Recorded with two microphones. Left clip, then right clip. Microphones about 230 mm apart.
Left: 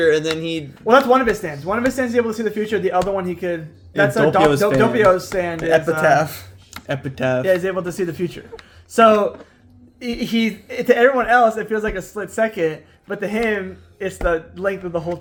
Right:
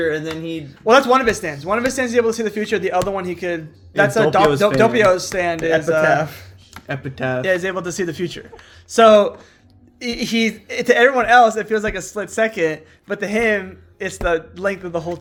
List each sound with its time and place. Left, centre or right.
0.0 s speech: left
0.9 s a man's voice: right
5.5 s a man's voice: centre
7.4 s a man's voice: right